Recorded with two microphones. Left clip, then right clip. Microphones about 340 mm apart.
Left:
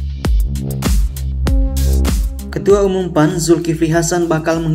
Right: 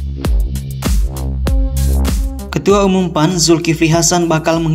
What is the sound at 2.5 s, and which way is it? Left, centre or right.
Music, centre.